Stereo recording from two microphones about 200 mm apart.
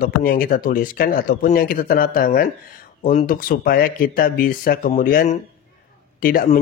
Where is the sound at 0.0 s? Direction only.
45° left (ahead or behind).